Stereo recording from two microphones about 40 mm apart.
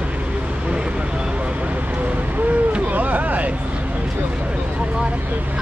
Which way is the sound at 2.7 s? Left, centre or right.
Right.